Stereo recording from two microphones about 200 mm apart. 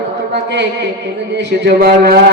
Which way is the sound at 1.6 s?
50° right (ahead or behind).